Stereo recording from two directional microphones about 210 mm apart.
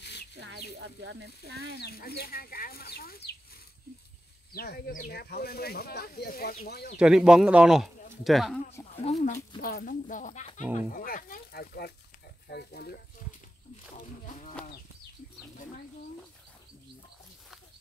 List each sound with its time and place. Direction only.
0.0 s a sound: 50° left (ahead or behind)
0.7 s speech: 55° right (ahead or behind)
1.8 s speech: 50° left (ahead or behind)
4.5 s speech: 45° left (ahead or behind)
7.0 s speech: 5° right (ahead or behind)
8.9 s speech: 30° left (ahead or behind)
9.6 s speech: 45° left (ahead or behind)